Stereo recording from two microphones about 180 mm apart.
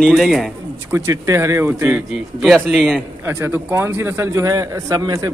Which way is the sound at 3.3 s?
10° right (ahead or behind).